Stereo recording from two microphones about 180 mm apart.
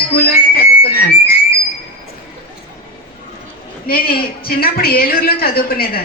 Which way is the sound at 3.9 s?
55° left (ahead or behind).